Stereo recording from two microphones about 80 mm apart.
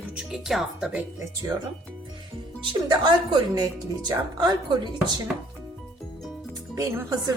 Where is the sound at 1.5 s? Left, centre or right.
Right.